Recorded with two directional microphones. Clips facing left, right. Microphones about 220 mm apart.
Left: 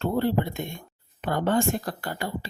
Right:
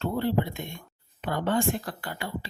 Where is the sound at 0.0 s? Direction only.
45° left (ahead or behind).